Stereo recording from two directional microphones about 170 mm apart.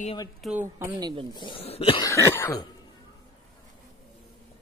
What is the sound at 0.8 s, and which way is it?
Speech, 25° right (ahead or behind).